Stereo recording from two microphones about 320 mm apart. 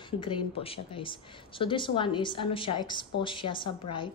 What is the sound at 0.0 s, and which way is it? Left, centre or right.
A woman's voice, centre.